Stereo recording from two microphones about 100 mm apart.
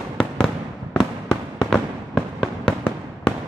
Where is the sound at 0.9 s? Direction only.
5° left (ahead or behind).